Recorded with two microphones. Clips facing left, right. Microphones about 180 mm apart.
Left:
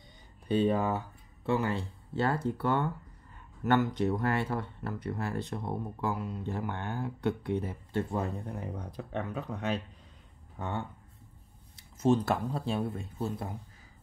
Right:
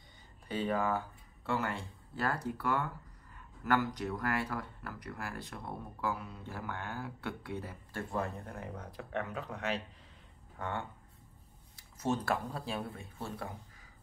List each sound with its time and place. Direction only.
0.5 s speech: 20° left (ahead or behind)
11.7 s speech: 20° left (ahead or behind)